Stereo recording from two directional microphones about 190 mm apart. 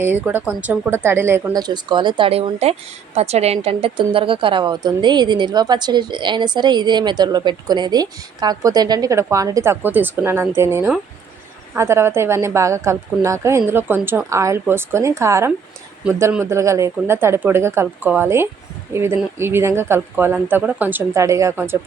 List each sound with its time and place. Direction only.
0.0 s a woman's voice: 10° right (ahead or behind)